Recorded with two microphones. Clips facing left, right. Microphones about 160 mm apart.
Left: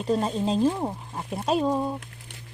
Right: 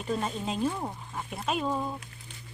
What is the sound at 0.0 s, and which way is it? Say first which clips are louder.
Speech: left 7 dB; 35° left (ahead or behind).